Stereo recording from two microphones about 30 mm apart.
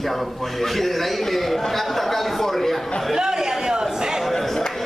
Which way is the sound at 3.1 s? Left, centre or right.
Centre.